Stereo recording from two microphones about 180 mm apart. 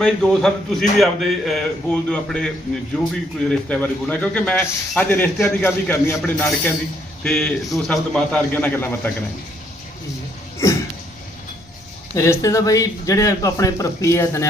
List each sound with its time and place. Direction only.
0.0 s a man's voice: 5° left (ahead or behind)
12.1 s a man's voice: 15° left (ahead or behind)